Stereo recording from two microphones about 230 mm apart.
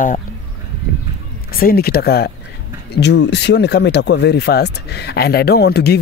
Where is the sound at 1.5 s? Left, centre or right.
Left.